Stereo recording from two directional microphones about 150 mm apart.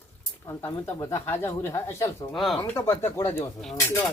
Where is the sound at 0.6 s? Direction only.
15° left (ahead or behind).